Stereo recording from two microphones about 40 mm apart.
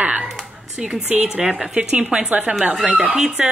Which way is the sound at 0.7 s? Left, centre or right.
Right.